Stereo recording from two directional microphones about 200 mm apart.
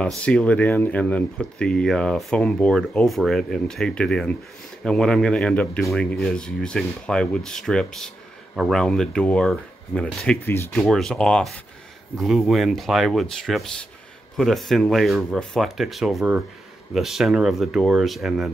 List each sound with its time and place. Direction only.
0.2 s speech: 5° left (ahead or behind)
10.7 s speech: centre (ahead or behind)